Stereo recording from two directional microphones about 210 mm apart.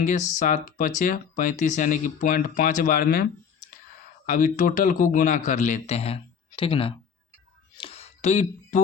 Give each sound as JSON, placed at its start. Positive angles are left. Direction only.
{"t": 0.3, "sound": "speech", "side_deg": 35}
{"t": 4.3, "sound": "speech", "side_deg": 40}
{"t": 7.8, "sound": "a sound", "side_deg": 25}